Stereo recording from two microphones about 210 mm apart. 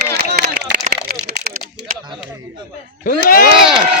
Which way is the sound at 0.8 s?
40° right (ahead or behind).